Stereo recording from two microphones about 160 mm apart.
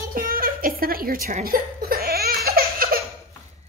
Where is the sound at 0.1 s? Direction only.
65° right (ahead or behind).